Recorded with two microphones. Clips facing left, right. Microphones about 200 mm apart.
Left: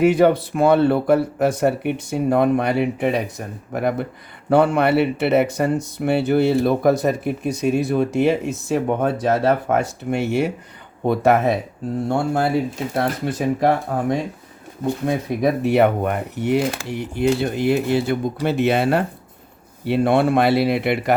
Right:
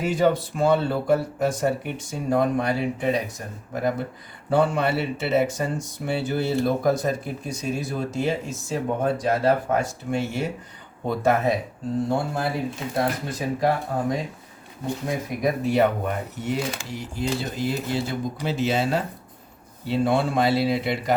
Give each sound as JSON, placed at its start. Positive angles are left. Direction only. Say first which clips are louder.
{"t": 0.0, "sound": "speech", "louder": "left 7 dB", "side_deg": 65}
{"t": 13.6, "sound": "speech", "louder": "left 2 dB", "side_deg": 70}
{"t": 15.0, "sound": "speech", "louder": "left 5 dB", "side_deg": 60}